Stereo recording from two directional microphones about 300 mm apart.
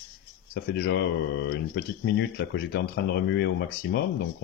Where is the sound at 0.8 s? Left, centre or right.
Left.